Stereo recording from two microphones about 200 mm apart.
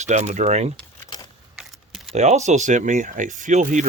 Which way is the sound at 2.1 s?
35° right (ahead or behind).